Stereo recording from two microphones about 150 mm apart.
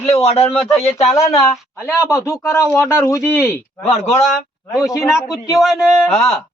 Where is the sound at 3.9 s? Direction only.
45° left (ahead or behind).